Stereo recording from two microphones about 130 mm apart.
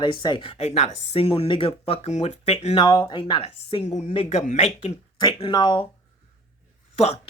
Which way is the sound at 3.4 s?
50° left (ahead or behind).